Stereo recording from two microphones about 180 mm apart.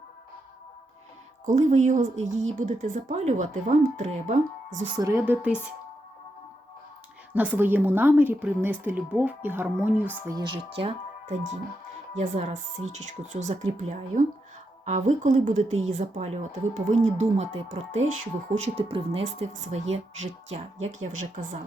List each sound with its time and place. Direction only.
1.5 s a woman's voice: 40° right (ahead or behind)
4.9 s a woman's voice: 20° right (ahead or behind)
7.3 s a woman's voice: 10° right (ahead or behind); by 11.3 s 30° right (ahead or behind)
13.0 s a woman's voice: 40° right (ahead or behind)